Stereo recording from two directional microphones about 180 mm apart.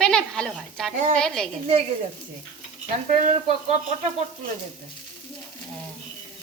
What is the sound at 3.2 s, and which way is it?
Speech, 40° right (ahead or behind).